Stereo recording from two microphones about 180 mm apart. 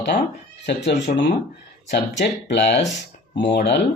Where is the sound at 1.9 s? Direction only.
70° left (ahead or behind).